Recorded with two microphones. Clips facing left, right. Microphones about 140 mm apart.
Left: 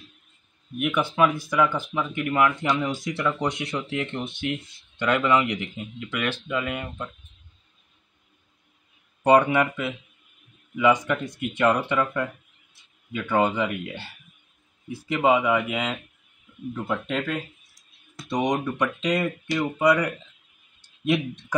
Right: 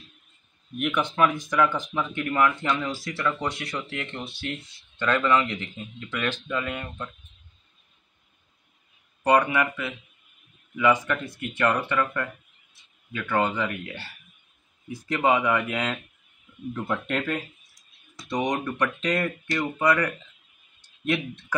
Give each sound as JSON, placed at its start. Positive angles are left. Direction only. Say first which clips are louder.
{"t": 0.7, "sound": "speech", "louder": "left 2 dB", "side_deg": 5}
{"t": 9.5, "sound": "speech", "louder": "left 3 dB", "side_deg": 20}
{"t": 15.0, "sound": "speech", "louder": "left 2 dB", "side_deg": 10}
{"t": 18.3, "sound": "speech", "louder": "left 2 dB", "side_deg": 10}